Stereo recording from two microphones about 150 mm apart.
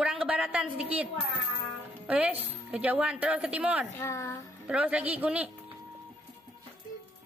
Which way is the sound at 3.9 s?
20° left (ahead or behind).